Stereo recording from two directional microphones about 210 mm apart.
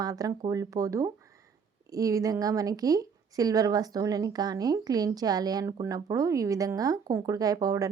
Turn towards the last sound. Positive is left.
turn(degrees=-15)  # may be behind; listen again after turning